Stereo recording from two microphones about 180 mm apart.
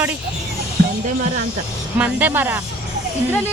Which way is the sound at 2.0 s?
10° right (ahead or behind).